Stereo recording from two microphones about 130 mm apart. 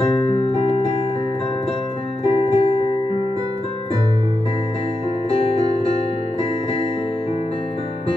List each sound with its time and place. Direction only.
0.5 s music: 55° left (ahead or behind)
2.2 s music: 50° left (ahead or behind)
5.3 s music: 50° left (ahead or behind)